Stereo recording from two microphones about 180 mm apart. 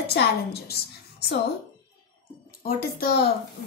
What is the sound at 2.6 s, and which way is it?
Speech, 60° left (ahead or behind).